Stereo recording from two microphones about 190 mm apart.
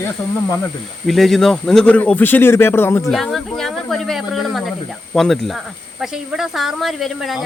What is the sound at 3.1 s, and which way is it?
Speech, centre (ahead or behind).